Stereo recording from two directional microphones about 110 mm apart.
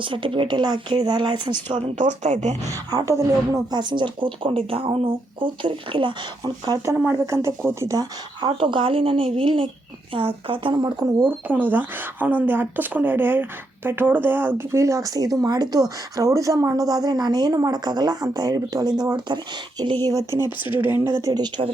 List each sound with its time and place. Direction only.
0.0 s a woman's voice: 50° right (ahead or behind)
1.7 s speech: 90° right
2.6 s a woman's voice: 35° right (ahead or behind); by 6.1 s 50° right (ahead or behind)
6.4 s speech: 35° right (ahead or behind)
6.9 s speech: 20° right (ahead or behind)
8.4 s a woman's voice: 50° right (ahead or behind)
11.0 s speech: 20° right (ahead or behind); by 19.4 s 40° right (ahead or behind)
20.3 s speech: 35° left (ahead or behind)
20.7 s speech: 20° right (ahead or behind); by 21.5 s 35° right (ahead or behind)